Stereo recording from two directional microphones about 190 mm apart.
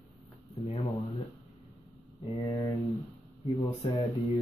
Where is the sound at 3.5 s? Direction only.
35° left (ahead or behind).